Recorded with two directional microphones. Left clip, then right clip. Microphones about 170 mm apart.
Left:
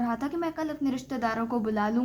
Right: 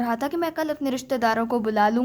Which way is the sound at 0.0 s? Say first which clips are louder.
Right 5 dB; 45° right (ahead or behind).